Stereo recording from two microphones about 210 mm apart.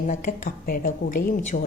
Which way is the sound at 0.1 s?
35° left (ahead or behind).